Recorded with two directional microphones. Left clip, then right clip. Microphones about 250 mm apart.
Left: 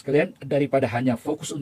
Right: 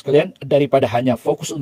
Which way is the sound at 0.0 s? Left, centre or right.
Right.